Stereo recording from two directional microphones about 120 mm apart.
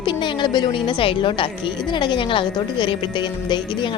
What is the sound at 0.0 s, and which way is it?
A woman's voice, 40° left (ahead or behind).